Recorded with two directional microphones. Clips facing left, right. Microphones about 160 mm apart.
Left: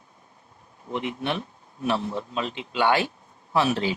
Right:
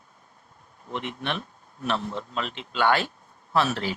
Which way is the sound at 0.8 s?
15° left (ahead or behind).